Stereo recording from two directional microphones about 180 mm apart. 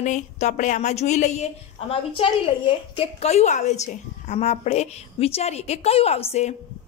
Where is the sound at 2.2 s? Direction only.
30° left (ahead or behind).